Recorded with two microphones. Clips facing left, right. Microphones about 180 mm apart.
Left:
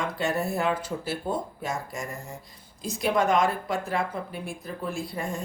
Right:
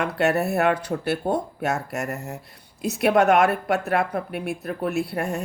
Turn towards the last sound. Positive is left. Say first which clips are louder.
# right 6 dB
turn(degrees=-70)  # may be behind; listen again after turning